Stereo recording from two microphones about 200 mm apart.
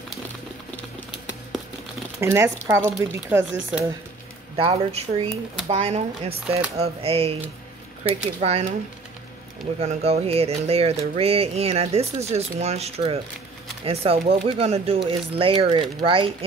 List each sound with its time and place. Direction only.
2.1 s speech: 15° right (ahead or behind)
4.6 s speech: 25° right (ahead or behind)
9.8 s speech: 30° right (ahead or behind)